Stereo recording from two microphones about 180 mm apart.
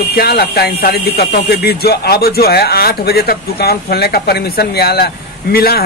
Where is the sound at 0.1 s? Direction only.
60° left (ahead or behind).